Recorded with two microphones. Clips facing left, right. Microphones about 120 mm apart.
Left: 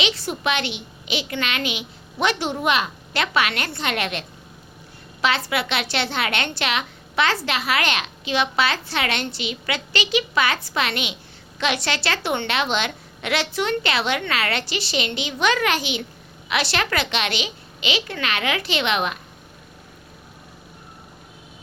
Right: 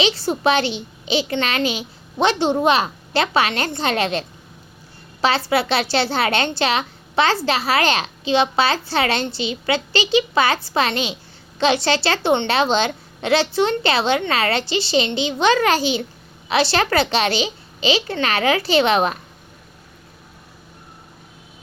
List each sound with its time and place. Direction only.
0.0 s a child's voice: 30° right (ahead or behind)
5.5 s a woman's voice: 35° right (ahead or behind)